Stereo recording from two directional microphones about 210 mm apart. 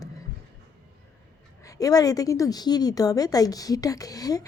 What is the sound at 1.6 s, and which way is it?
A woman's voice, 15° left (ahead or behind).